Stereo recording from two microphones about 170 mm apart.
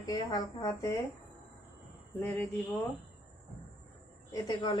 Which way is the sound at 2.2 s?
10° left (ahead or behind).